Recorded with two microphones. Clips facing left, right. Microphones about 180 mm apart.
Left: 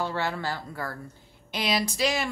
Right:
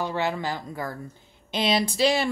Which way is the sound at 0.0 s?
15° right (ahead or behind).